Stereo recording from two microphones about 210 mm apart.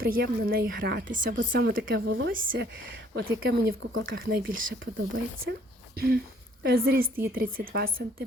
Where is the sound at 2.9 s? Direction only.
45° right (ahead or behind).